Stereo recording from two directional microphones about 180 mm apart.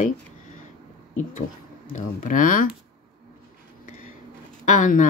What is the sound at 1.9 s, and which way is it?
Speech, 45° left (ahead or behind).